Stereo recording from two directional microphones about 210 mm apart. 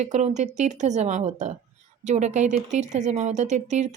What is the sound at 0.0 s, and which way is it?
Speech, 35° right (ahead or behind).